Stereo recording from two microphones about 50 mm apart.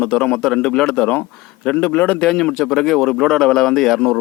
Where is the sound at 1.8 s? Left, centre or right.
Left.